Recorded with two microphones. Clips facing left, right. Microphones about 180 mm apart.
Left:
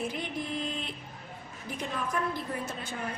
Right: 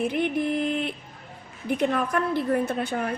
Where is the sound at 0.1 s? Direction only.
60° right (ahead or behind).